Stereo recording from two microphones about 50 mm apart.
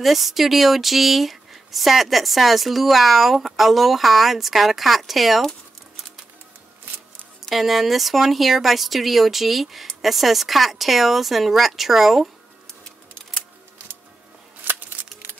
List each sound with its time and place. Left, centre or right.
0.0 s speech: centre
7.4 s speech: centre
14.6 s scissors: right